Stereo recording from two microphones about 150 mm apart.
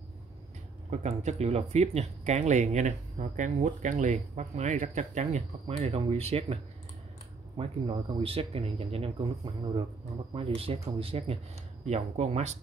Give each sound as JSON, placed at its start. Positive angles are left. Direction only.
{"t": 0.8, "sound": "speech", "side_deg": -50}
{"t": 7.5, "sound": "speech", "side_deg": -30}
{"t": 10.3, "sound": "speech", "side_deg": -40}